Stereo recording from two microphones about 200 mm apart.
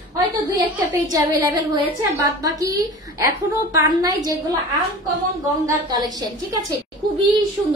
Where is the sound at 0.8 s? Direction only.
15° right (ahead or behind).